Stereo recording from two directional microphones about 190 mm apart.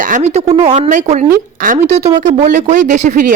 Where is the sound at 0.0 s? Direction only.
40° right (ahead or behind).